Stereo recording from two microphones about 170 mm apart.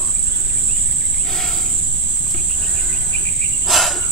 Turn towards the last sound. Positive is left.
turn(degrees=0)  # may be behind; listen again after turning